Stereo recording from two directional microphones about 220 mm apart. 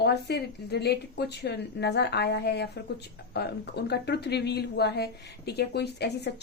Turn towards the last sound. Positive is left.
turn(degrees=50)  # may be behind; listen again after turning